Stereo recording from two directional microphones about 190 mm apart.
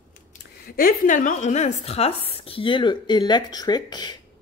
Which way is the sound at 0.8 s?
45° left (ahead or behind).